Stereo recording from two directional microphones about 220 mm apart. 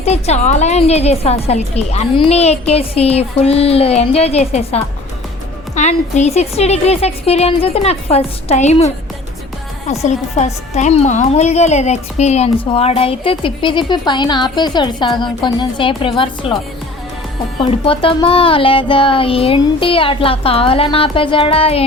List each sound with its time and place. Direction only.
0.0 s a woman's voice: 30° left (ahead or behind)
9.9 s a woman's voice: 30° left (ahead or behind)
17.6 s a woman's voice: 25° left (ahead or behind)